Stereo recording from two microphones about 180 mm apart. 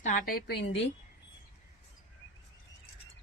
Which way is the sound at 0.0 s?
50° left (ahead or behind).